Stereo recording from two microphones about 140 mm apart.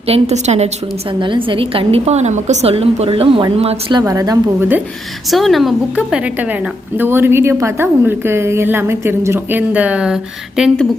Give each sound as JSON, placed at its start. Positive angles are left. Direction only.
{"t": 0.1, "sound": "a woman's voice", "side_deg": -50}
{"t": 1.2, "sound": "a woman's voice", "side_deg": -35}
{"t": 4.0, "sound": "a woman's voice", "side_deg": -25}
{"t": 5.3, "sound": "a woman's voice", "side_deg": 0}